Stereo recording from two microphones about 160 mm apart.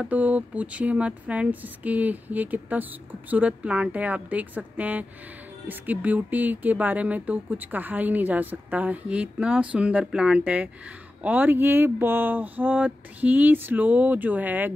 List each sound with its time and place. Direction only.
0.0 s speech: 10° right (ahead or behind)